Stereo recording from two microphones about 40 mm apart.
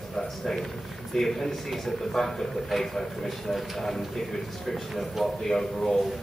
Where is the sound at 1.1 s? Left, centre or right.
Centre.